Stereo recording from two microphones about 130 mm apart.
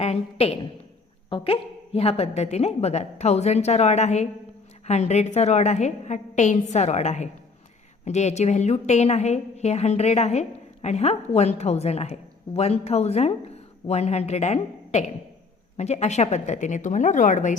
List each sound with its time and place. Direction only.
0.0 s a woman's voice: 50° left (ahead or behind); by 17.5 s 75° left (ahead or behind)